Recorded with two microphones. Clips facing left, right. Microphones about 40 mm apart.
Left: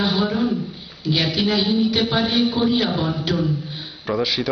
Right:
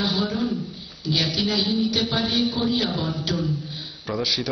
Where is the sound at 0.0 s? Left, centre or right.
Centre.